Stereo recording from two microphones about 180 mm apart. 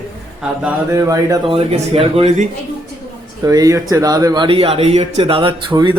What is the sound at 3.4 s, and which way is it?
Speech, 20° right (ahead or behind).